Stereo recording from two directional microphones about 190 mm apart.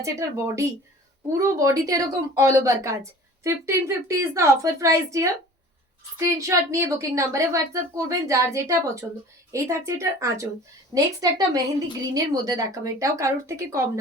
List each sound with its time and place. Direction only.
0.0 s a woman's voice: 15° right (ahead or behind)